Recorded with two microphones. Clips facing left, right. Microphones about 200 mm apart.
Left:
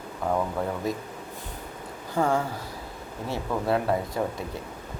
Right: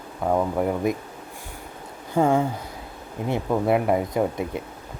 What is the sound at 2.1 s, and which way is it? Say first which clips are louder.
Speech: right 5 dB; 20° right (ahead or behind).